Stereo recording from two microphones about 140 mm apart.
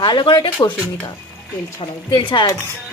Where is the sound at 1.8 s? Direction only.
35° left (ahead or behind).